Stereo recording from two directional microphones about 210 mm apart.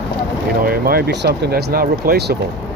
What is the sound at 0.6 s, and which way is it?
Speech, 45° right (ahead or behind).